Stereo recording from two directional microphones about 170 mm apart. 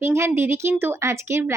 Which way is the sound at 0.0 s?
15° right (ahead or behind).